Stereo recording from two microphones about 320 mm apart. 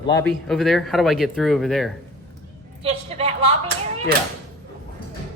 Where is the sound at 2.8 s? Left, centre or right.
Centre.